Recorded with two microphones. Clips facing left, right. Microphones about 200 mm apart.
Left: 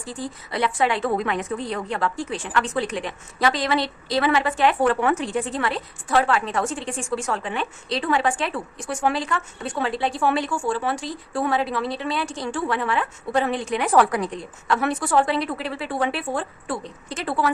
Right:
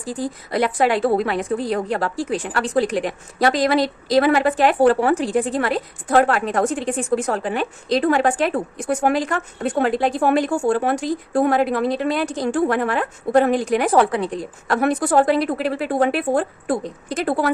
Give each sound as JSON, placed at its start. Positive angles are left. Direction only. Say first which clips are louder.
{"t": 0.0, "sound": "a woman's voice", "louder": "right 6 dB", "side_deg": -40}